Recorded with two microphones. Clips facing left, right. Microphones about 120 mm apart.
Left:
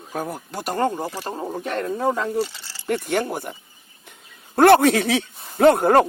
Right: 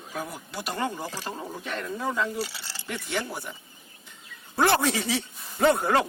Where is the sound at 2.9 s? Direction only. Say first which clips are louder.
Left 9 dB; 45° left (ahead or behind).